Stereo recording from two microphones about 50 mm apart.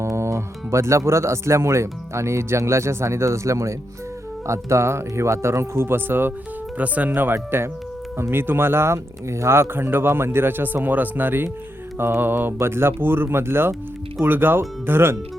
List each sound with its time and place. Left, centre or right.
0.0 s speech: right
6.7 s speech: right